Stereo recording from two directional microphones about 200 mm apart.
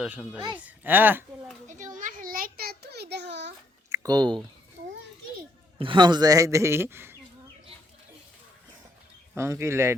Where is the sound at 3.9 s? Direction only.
20° right (ahead or behind).